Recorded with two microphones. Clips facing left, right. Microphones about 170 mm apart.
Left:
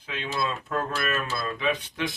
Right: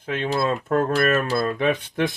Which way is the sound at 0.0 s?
50° right (ahead or behind).